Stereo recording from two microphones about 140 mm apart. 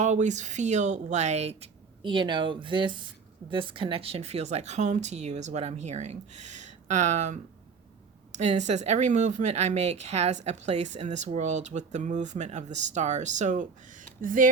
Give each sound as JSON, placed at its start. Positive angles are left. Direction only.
{"t": 0.0, "sound": "speech", "side_deg": -60}
{"t": 2.0, "sound": "speech", "side_deg": -35}
{"t": 14.2, "sound": "speech", "side_deg": -75}